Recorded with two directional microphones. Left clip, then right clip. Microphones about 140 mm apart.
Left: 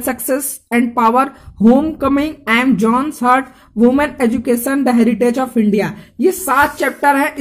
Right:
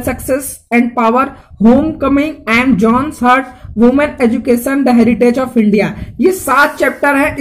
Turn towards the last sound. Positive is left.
turn(degrees=25)  # may be behind; listen again after turning